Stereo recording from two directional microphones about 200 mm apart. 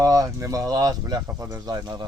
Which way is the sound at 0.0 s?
15° right (ahead or behind).